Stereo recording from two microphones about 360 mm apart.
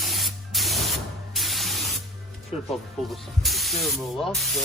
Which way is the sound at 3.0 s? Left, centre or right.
Centre.